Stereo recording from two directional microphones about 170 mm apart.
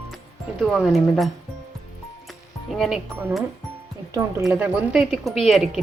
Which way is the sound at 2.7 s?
Centre (ahead or behind).